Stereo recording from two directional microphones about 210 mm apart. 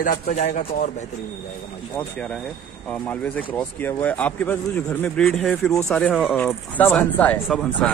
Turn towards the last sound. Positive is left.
turn(degrees=5)  # may be behind; listen again after turning